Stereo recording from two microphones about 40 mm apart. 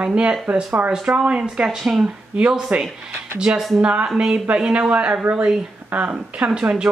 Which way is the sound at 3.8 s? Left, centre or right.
Right.